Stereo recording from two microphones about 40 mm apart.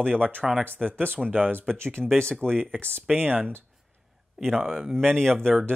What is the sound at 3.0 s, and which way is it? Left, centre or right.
Speech, right.